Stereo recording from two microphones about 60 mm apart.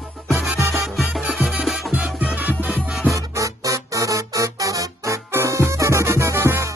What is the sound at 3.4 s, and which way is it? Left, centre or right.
Music, right.